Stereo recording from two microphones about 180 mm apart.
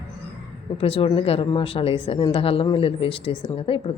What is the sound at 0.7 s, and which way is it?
A woman's voice, 30° left (ahead or behind).